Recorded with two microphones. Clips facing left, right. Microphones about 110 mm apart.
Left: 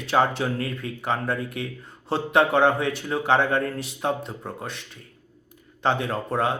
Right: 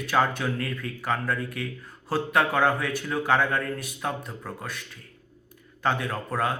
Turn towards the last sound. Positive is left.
turn(degrees=25)  # may be behind; listen again after turning